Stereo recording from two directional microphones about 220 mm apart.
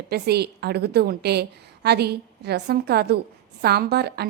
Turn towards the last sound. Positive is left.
turn(degrees=-45)  # may be behind; listen again after turning